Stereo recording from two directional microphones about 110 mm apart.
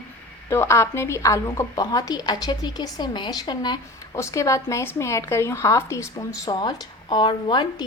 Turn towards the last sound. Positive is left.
turn(degrees=50)  # may be behind; listen again after turning